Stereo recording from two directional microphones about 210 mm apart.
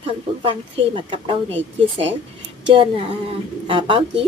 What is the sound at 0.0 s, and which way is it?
Speech, 25° right (ahead or behind).